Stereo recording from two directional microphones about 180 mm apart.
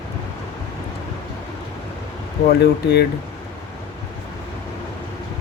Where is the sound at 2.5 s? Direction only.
65° left (ahead or behind).